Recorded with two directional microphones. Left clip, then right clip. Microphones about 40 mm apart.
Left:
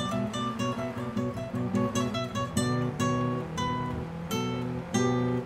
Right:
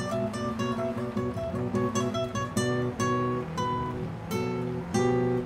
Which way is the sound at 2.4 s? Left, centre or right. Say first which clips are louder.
Right 1 dB; centre.